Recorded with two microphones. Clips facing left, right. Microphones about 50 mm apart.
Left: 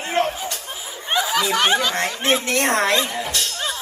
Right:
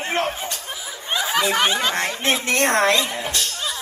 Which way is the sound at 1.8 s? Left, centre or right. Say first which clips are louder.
Even; right.